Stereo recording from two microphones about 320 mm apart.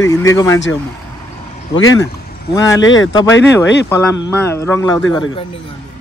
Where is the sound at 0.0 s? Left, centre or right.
Centre.